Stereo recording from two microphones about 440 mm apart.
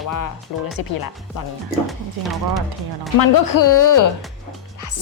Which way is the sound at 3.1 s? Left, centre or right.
Left.